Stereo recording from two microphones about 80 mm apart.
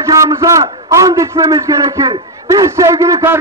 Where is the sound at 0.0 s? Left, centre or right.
Right.